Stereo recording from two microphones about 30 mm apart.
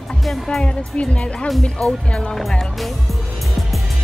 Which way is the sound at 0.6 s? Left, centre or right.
Left.